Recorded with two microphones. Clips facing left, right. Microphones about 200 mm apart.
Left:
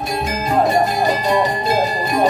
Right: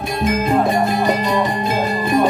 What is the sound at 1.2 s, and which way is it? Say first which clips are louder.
Music: left 1 dB; 40° left (ahead or behind).